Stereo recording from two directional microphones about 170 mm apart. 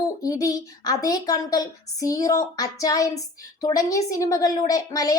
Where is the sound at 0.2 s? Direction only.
20° left (ahead or behind).